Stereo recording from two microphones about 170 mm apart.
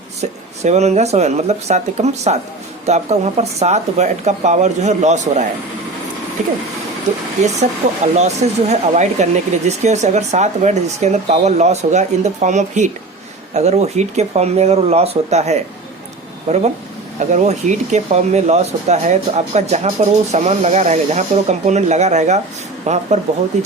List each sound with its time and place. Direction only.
0.2 s speech: 40° right (ahead or behind)
7.6 s speech: 40° right (ahead or behind)